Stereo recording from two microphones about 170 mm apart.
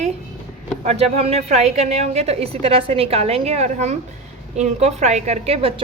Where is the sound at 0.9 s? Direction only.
35° right (ahead or behind).